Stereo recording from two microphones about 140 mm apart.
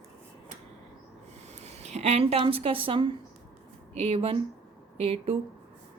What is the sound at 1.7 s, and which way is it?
A woman's voice, 50° right (ahead or behind).